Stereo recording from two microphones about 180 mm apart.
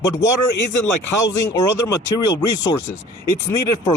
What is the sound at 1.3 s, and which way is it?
Speech, 20° left (ahead or behind).